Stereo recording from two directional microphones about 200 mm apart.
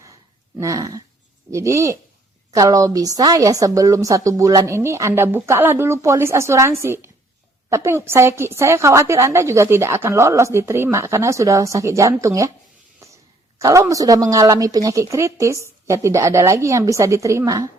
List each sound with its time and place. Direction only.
0.5 s a woman's voice: 15° right (ahead or behind)
13.6 s a woman's voice: 15° right (ahead or behind)